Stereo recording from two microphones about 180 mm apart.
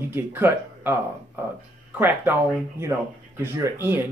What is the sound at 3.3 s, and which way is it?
Speech, 15° right (ahead or behind).